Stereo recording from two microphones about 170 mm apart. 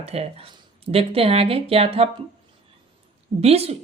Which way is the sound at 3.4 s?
35° right (ahead or behind).